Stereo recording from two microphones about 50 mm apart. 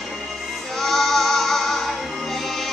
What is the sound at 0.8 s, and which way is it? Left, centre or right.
Music, centre.